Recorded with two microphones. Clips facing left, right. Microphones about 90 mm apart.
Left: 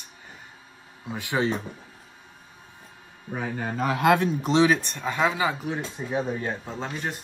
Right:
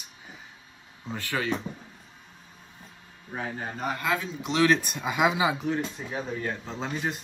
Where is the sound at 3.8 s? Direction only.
85° left; by 4.3 s 65° left (ahead or behind).